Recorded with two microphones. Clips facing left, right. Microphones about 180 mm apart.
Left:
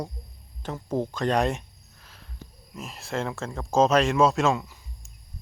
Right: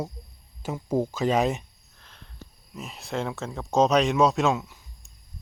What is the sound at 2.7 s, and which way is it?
Speech, centre (ahead or behind).